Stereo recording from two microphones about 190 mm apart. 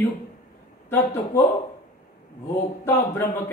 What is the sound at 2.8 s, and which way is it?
Speech, 15° left (ahead or behind).